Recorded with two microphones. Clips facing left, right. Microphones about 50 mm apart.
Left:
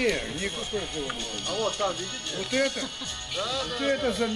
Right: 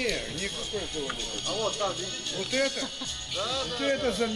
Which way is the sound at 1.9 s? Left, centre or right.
Left.